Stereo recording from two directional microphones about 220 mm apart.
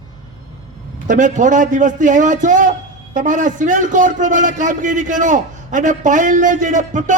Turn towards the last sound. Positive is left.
turn(degrees=-35)  # may be behind; listen again after turning